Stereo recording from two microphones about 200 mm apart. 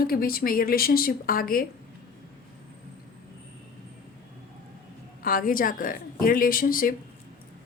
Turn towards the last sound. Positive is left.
turn(degrees=45)  # may be behind; listen again after turning